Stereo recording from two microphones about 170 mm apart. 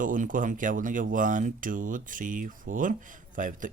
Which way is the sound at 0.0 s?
50° right (ahead or behind).